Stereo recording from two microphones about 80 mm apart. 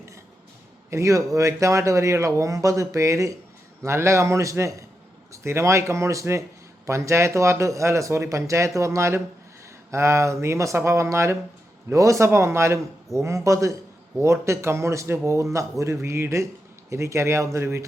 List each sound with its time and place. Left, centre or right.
0.9 s speech: right